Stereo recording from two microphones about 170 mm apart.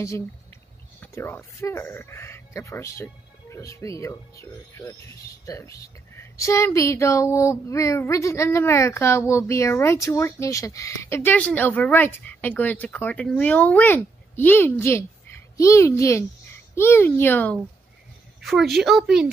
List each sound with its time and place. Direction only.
1.0 s a woman's voice: 15° left (ahead or behind)
18.4 s a woman's voice: centre (ahead or behind)